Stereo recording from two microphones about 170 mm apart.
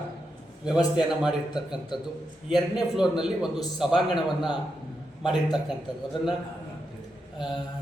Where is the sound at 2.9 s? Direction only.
5° right (ahead or behind).